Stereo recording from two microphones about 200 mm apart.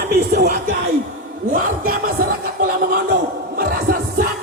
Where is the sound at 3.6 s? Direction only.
45° right (ahead or behind).